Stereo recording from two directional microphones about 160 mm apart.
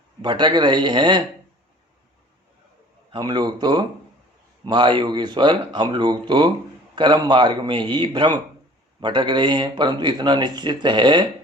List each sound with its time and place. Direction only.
0.2 s speech: 30° right (ahead or behind)
3.1 s speech: 30° right (ahead or behind)